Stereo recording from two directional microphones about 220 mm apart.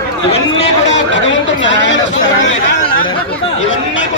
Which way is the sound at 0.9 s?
55° left (ahead or behind).